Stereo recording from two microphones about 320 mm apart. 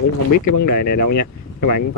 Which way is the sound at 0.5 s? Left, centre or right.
Left.